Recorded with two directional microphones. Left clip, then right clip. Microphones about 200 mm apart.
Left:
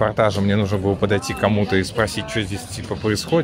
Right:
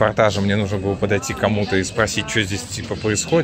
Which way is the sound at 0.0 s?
5° left (ahead or behind).